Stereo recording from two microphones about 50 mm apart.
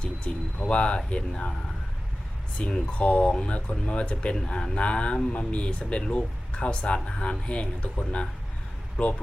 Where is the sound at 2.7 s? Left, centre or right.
Left.